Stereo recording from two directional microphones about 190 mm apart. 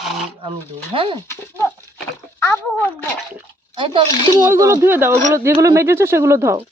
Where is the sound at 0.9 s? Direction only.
30° right (ahead or behind).